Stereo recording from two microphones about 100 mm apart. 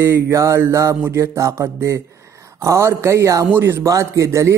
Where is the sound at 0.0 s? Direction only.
25° right (ahead or behind).